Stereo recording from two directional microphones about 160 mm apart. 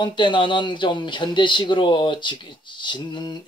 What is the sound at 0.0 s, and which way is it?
Speech, 30° left (ahead or behind).